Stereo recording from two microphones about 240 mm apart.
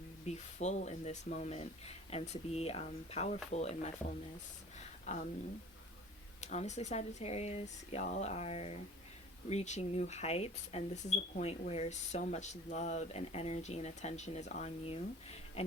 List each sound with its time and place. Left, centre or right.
0.3 s speech: left
4.8 s a sound: left
6.4 s speech: left